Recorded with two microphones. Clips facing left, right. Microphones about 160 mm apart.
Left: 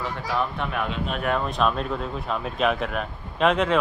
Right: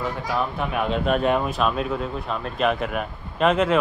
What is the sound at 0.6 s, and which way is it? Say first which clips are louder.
Speech: right 4 dB; 5° right (ahead or behind).